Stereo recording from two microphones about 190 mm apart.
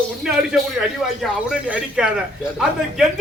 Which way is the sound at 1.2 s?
5° right (ahead or behind).